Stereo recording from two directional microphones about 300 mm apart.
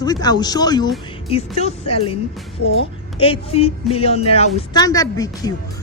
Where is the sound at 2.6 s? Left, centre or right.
Left.